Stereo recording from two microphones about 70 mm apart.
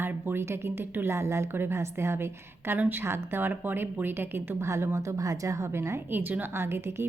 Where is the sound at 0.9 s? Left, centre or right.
Right.